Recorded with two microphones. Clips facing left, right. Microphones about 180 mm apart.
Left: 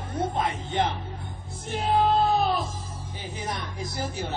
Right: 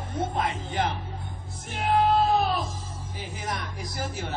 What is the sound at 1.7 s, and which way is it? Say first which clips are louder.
Music: even; 25° left (ahead or behind).